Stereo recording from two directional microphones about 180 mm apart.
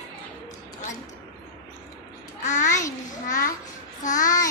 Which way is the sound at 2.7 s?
15° left (ahead or behind).